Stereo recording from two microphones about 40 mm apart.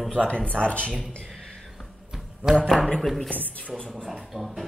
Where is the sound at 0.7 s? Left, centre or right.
Left.